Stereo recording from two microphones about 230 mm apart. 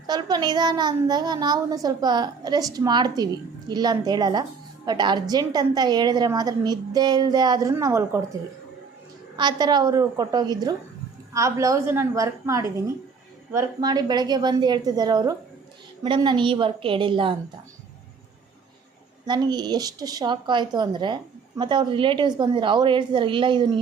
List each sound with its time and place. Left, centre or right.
0.1 s a child's voice: centre
19.3 s a woman's voice: centre